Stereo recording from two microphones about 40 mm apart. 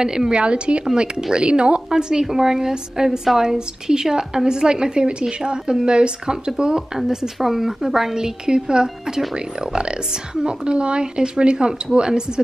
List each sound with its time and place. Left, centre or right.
0.0 s speech: centre
7.3 s speech: centre